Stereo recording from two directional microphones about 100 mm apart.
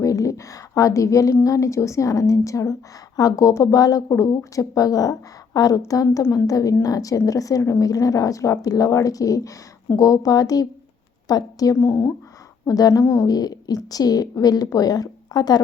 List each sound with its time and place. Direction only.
0.0 s a woman's voice: 35° left (ahead or behind)
12.6 s speech: 40° left (ahead or behind)